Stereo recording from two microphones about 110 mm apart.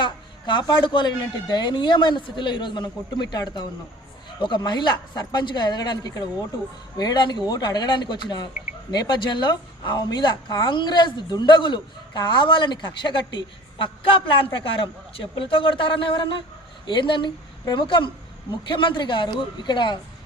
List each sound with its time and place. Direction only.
0.0 s a woman's voice: 45° left (ahead or behind)